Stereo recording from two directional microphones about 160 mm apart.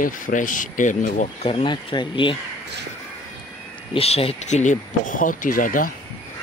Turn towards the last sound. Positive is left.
turn(degrees=60)  # may be behind; listen again after turning